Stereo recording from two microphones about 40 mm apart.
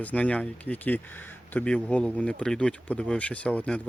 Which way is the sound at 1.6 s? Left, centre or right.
Left.